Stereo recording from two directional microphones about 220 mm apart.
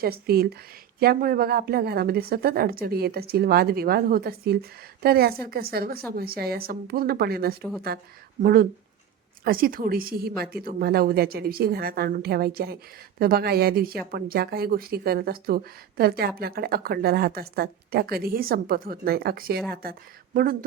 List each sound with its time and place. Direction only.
0.0 s speech: 45° right (ahead or behind)